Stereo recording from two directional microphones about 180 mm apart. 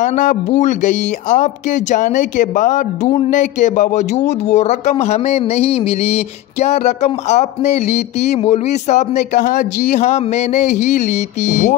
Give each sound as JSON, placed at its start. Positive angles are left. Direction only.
{"t": 0.0, "sound": "speech", "side_deg": 45}